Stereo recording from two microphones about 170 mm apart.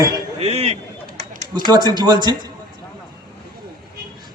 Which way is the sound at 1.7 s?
25° right (ahead or behind).